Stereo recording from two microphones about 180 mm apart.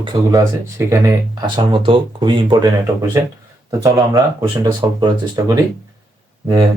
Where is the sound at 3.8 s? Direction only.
20° right (ahead or behind).